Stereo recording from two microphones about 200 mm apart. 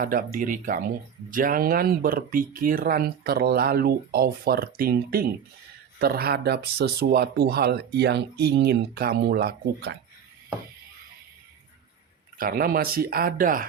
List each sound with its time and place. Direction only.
0.0 s speech: 45° right (ahead or behind)
12.4 s speech: 50° right (ahead or behind)